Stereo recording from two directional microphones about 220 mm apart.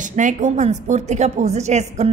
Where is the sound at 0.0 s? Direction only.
35° right (ahead or behind).